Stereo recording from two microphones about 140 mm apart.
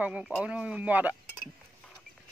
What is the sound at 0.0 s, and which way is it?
Speech, 5° right (ahead or behind).